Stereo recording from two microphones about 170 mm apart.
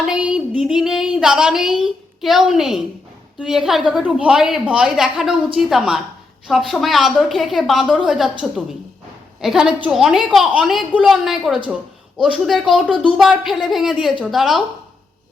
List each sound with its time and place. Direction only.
0.0 s music: 5° right (ahead or behind)
11.7 s speech: centre (ahead or behind)
13.1 s music: centre (ahead or behind)